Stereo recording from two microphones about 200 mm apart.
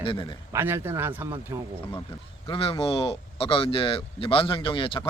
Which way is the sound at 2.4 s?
25° left (ahead or behind).